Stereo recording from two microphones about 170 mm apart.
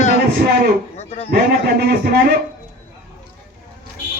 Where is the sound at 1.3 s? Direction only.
70° right (ahead or behind).